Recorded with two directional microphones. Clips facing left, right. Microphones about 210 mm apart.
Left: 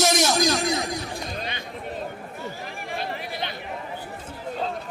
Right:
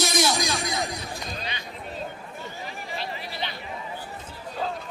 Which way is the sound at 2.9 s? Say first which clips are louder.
Left 4 dB; 50° left (ahead or behind).